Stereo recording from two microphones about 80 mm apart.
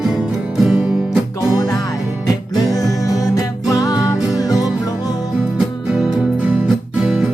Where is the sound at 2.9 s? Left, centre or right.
Left.